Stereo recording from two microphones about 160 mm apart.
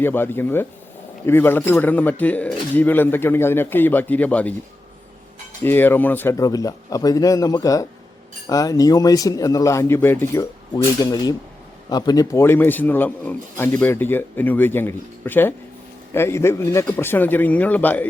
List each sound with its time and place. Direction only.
0.0 s a man's voice: 15° left (ahead or behind)
5.6 s speech: 10° left (ahead or behind)
11.0 s a man's voice: 25° left (ahead or behind)